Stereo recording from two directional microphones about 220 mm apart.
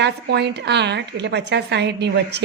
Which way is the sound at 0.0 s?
50° right (ahead or behind).